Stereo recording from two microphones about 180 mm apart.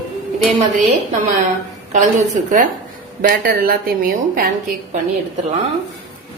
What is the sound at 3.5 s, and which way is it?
A woman's voice, 55° right (ahead or behind).